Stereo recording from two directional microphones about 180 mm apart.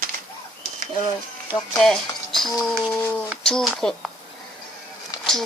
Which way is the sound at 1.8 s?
Centre (ahead or behind).